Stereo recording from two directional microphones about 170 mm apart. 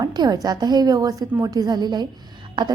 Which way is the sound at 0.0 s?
25° right (ahead or behind).